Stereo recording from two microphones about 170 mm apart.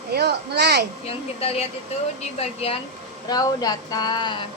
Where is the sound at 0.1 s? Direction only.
75° right (ahead or behind).